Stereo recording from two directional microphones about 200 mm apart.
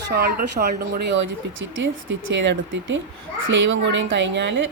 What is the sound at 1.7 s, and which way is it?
Speech, 75° right (ahead or behind).